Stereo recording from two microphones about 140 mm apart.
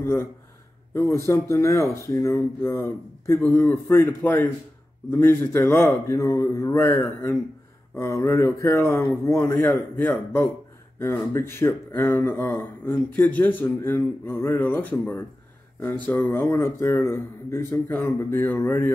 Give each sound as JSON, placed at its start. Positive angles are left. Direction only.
{"t": 0.0, "sound": "speech", "side_deg": 20}